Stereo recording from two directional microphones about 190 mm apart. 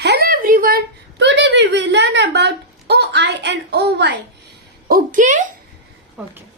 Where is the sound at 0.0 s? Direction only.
60° right (ahead or behind).